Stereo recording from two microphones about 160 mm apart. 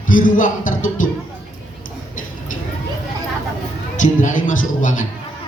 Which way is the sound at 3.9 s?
55° left (ahead or behind).